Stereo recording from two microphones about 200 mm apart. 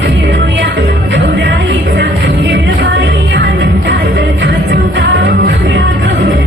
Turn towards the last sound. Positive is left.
turn(degrees=-60)  # may be behind; listen again after turning